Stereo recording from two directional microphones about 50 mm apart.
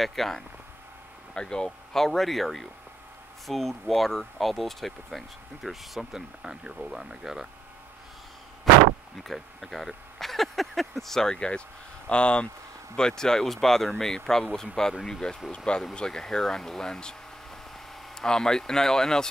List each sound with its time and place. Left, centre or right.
0.0 s speech: centre
1.3 s speech: centre
9.1 s speech: centre
11.3 s speech: left
18.1 s speech: centre